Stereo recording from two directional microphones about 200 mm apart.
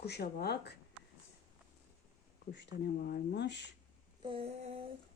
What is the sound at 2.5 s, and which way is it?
Speech, 60° left (ahead or behind).